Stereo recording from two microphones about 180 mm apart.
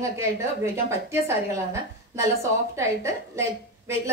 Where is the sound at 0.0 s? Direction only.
15° right (ahead or behind).